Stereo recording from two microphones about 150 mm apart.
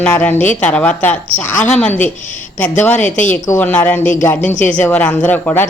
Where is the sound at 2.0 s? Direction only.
55° left (ahead or behind).